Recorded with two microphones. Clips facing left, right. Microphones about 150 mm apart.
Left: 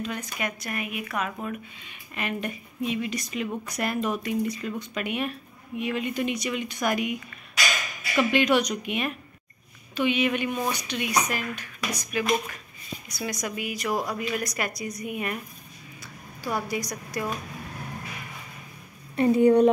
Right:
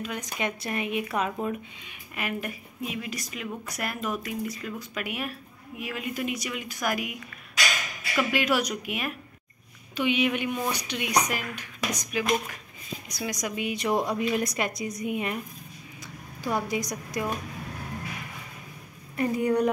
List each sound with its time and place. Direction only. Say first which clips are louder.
0.0 s speech: left 2 dB; 15° right (ahead or behind)
0.4 s a woman's voice: right 4 dB; 25° right (ahead or behind)
1.4 s speech: right 3 dB; 15° right (ahead or behind)
8.2 s speech: left 4 dB; 5° right (ahead or behind)
13.6 s a woman's voice: right 3 dB; 25° right (ahead or behind)
16.4 s a woman's voice: right 1 dB; 20° right (ahead or behind)
19.1 s speech: left 6 dB; 25° left (ahead or behind)